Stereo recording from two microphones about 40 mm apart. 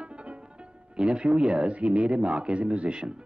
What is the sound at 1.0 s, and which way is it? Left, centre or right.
Speech, right.